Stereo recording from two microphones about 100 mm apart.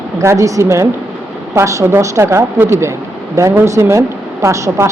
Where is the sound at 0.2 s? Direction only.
30° right (ahead or behind).